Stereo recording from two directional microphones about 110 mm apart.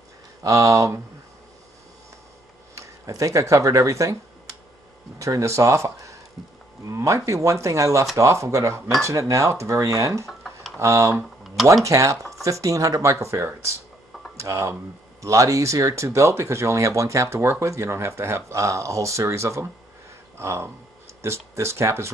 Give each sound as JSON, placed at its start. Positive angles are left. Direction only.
{"t": 0.4, "sound": "speech", "side_deg": -30}
{"t": 2.7, "sound": "speech", "side_deg": -30}
{"t": 5.2, "sound": "speech", "side_deg": -30}
{"t": 10.2, "sound": "tick-tock", "side_deg": 0}
{"t": 10.8, "sound": "speech", "side_deg": -25}